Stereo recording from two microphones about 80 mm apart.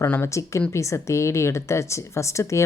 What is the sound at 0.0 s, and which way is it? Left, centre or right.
Speech, left.